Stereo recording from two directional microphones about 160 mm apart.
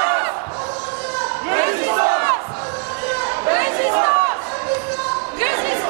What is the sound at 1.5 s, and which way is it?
Battle cry, 15° right (ahead or behind).